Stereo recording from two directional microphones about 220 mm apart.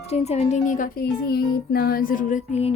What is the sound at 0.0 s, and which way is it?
Speech, 30° left (ahead or behind).